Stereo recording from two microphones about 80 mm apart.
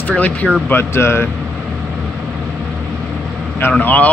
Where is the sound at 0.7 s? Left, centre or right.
Left.